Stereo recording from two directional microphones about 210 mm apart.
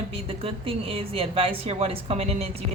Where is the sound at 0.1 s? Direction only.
25° right (ahead or behind).